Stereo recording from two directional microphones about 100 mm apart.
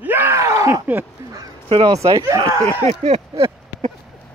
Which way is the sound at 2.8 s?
85° right.